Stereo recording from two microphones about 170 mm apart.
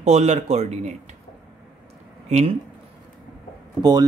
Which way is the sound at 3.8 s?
20° right (ahead or behind).